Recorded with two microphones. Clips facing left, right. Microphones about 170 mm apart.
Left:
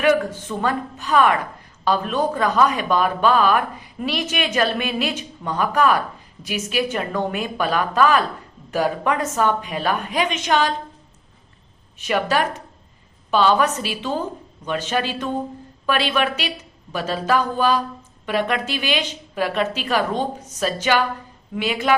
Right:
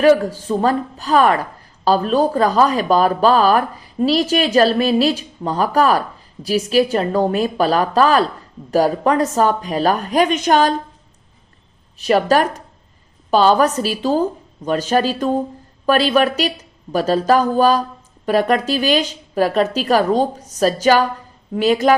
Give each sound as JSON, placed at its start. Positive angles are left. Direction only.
{"t": 0.0, "sound": "speech", "side_deg": -35}
{"t": 11.9, "sound": "speech", "side_deg": -35}